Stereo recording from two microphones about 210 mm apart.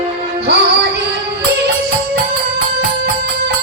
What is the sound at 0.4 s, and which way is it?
Music, 50° right (ahead or behind).